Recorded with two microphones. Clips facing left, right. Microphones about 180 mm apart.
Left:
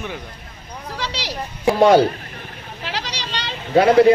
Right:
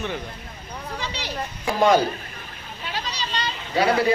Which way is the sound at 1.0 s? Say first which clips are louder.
Left 5 dB; 90° left.